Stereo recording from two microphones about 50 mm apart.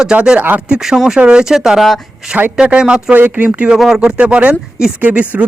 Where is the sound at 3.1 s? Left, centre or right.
Right.